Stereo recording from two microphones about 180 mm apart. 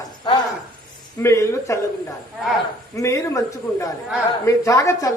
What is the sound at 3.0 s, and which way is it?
Speech, 20° left (ahead or behind).